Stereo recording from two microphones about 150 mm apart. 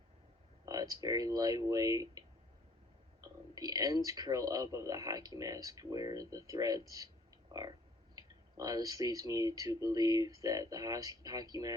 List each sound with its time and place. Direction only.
0.6 s speech: 25° right (ahead or behind)
3.5 s speech: 25° right (ahead or behind)
8.1 s speech: 25° right (ahead or behind)